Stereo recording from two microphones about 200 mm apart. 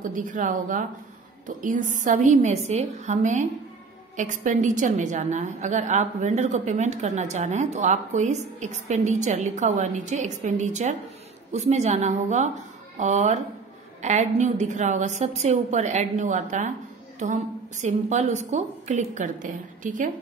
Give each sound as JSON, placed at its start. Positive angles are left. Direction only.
{"t": 0.0, "sound": "a woman's voice", "side_deg": -40}